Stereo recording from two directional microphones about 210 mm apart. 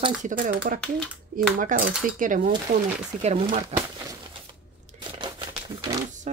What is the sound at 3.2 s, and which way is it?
Speech, 30° right (ahead or behind).